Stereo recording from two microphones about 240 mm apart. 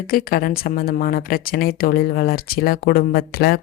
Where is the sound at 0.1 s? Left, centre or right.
Left.